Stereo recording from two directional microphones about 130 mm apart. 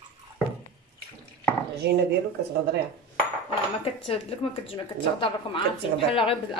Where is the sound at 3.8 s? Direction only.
50° left (ahead or behind).